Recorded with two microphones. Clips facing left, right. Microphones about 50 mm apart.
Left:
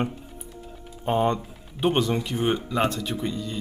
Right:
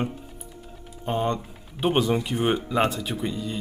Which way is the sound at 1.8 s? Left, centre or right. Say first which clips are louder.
Right 1 dB; centre.